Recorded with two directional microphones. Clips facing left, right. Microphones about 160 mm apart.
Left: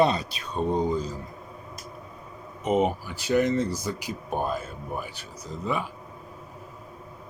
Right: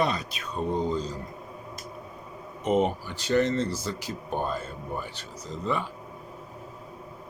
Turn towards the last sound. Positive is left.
turn(degrees=10)  # may be behind; listen again after turning